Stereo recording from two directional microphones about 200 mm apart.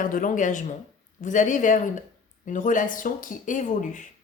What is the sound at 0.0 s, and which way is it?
Speech, 40° left (ahead or behind).